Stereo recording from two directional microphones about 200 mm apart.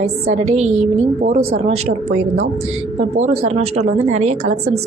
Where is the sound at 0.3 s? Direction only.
35° right (ahead or behind).